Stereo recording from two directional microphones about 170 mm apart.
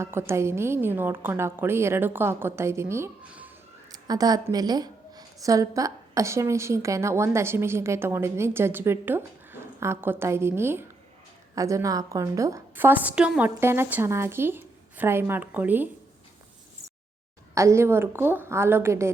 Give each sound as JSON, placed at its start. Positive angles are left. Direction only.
{"t": 0.0, "sound": "a woman's voice", "side_deg": -15}
{"t": 3.9, "sound": "a woman's voice", "side_deg": -25}
{"t": 17.5, "sound": "a woman's voice", "side_deg": -15}